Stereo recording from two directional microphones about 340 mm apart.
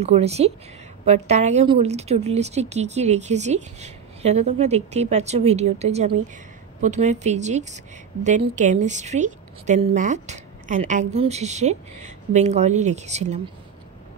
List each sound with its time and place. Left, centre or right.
0.0 s a woman's voice: centre